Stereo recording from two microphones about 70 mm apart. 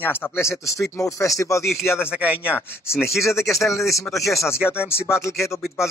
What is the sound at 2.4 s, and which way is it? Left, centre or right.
Speech, left.